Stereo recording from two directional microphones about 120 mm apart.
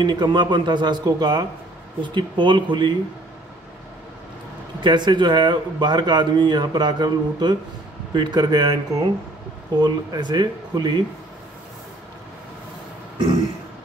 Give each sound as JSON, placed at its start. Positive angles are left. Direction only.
{"t": 0.0, "sound": "speech", "side_deg": -40}
{"t": 4.8, "sound": "speech", "side_deg": -40}